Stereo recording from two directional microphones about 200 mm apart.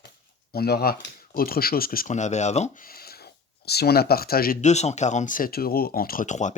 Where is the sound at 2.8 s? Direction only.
50° left (ahead or behind).